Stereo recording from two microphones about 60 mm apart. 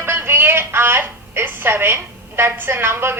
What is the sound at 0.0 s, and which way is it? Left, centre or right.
A woman's voice, right.